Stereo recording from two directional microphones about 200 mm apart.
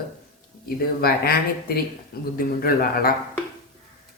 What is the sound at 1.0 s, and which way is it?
Speech, 50° left (ahead or behind).